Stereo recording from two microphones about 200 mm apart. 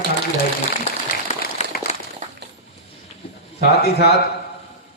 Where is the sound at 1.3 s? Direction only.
35° left (ahead or behind).